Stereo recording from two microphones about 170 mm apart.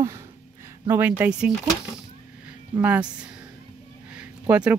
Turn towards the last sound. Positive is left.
turn(degrees=-5)  # may be behind; listen again after turning